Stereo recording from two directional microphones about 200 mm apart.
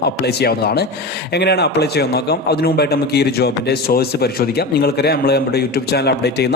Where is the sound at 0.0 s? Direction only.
55° left (ahead or behind).